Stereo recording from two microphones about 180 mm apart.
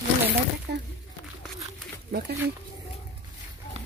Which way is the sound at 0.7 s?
60° right (ahead or behind).